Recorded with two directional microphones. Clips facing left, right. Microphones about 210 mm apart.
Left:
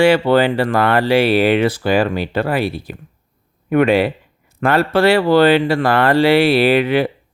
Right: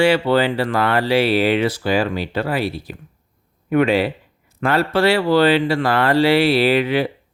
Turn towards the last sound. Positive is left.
turn(degrees=55)  # may be behind; listen again after turning